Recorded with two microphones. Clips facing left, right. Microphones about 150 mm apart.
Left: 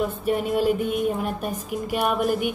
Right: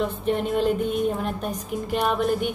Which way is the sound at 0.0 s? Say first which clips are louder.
Even; 5° left (ahead or behind).